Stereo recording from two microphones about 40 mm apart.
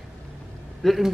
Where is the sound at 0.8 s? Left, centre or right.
Centre.